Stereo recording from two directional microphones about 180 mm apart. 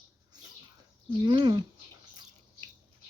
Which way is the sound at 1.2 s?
25° right (ahead or behind).